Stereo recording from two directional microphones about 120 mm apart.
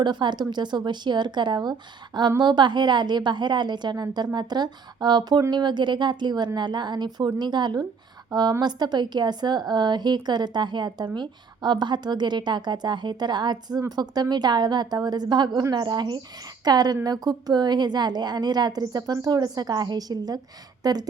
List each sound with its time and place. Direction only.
0.0 s a woman's voice: 40° right (ahead or behind)